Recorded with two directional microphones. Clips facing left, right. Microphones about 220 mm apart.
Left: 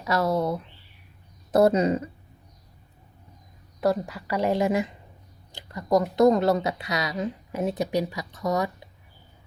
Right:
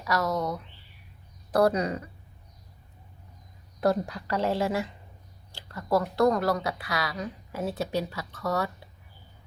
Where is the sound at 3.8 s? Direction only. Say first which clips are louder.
Left 1 dB; 5° left (ahead or behind).